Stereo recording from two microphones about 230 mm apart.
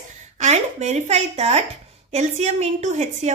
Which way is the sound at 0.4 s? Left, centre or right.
Right.